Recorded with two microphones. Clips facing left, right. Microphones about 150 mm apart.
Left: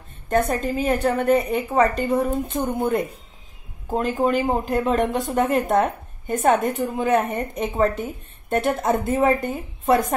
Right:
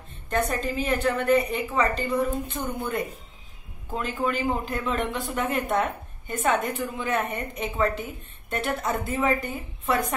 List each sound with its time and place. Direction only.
0.3 s a woman's voice: 50° left (ahead or behind)